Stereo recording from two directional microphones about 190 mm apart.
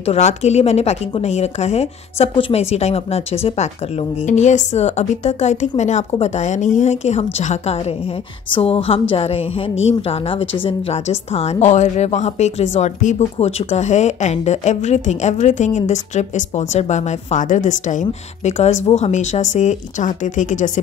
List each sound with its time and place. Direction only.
0.0 s a woman's voice: 35° left (ahead or behind)
10.6 s a woman's voice: 35° left (ahead or behind)